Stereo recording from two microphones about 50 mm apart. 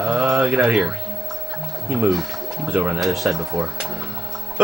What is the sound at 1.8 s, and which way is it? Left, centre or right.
Speech, right.